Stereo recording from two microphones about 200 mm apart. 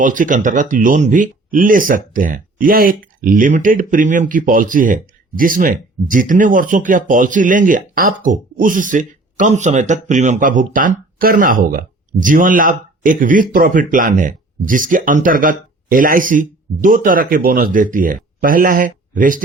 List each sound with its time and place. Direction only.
0.0 s speech: 40° right (ahead or behind)